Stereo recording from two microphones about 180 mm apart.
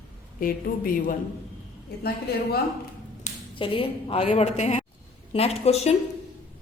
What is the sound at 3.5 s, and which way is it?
A woman's voice, 30° left (ahead or behind).